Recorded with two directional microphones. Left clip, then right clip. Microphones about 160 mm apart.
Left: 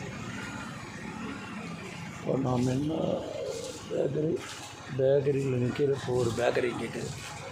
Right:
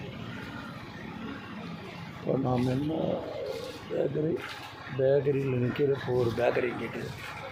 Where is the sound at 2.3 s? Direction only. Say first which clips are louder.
Right 1 dB; 5° right (ahead or behind).